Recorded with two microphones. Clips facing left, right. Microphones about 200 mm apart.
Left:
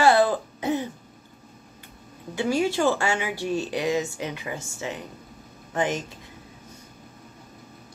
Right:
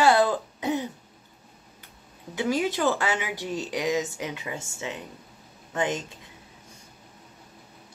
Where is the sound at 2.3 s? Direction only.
20° right (ahead or behind).